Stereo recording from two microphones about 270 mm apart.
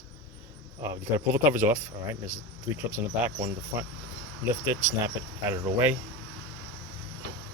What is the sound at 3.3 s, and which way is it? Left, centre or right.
Cricket, right.